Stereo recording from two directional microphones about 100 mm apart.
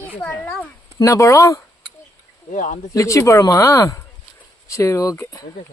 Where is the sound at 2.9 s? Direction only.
30° left (ahead or behind).